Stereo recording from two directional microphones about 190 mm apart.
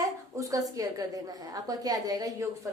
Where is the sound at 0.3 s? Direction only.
15° right (ahead or behind).